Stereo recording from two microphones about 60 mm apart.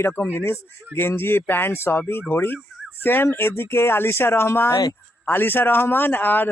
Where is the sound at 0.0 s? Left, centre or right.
Left.